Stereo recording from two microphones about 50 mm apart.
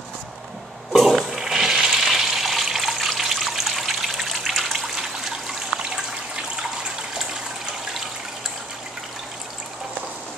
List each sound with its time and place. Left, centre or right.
0.9 s toilet flush: centre
4.8 s trickle: centre
5.8 s water: centre